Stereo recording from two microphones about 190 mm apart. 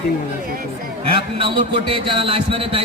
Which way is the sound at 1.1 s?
30° right (ahead or behind).